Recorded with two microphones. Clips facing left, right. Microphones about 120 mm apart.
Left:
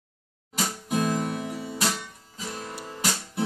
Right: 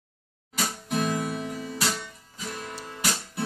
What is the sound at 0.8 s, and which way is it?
Guitar, 15° left (ahead or behind).